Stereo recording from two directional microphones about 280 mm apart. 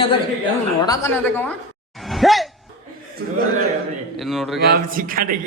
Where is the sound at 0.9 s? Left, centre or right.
Centre.